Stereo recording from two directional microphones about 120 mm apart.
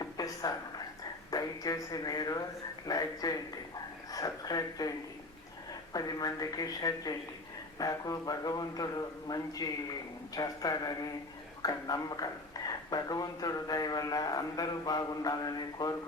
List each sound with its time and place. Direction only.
0.0 s a sound: 35° left (ahead or behind)
1.3 s speech: 30° left (ahead or behind)
5.9 s speech: 35° left (ahead or behind)